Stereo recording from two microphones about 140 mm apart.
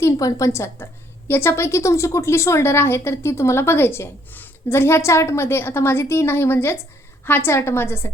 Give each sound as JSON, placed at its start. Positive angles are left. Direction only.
{"t": 0.0, "sound": "a woman's voice", "side_deg": 25}